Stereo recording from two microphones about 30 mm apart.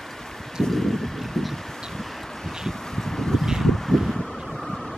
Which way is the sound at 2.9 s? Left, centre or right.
Centre.